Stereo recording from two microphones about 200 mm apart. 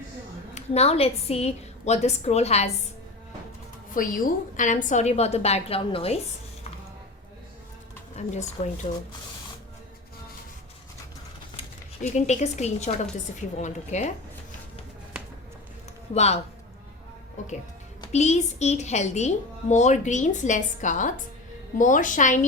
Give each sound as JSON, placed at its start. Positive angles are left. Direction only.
{"t": 0.5, "sound": "a woman's voice", "side_deg": 30}
{"t": 3.9, "sound": "a woman's voice", "side_deg": 45}
{"t": 8.1, "sound": "a woman's voice", "side_deg": 35}
{"t": 12.1, "sound": "a woman's voice", "side_deg": 35}
{"t": 16.1, "sound": "a woman's voice", "side_deg": 35}
{"t": 18.0, "sound": "a woman's voice", "side_deg": 35}